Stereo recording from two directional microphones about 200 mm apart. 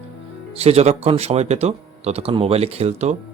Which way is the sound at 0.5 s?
30° right (ahead or behind).